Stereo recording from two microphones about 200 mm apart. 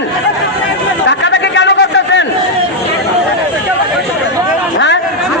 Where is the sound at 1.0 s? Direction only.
65° left (ahead or behind).